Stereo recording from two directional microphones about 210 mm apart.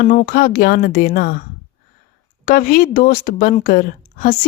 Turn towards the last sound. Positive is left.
turn(degrees=45)  # may be behind; listen again after turning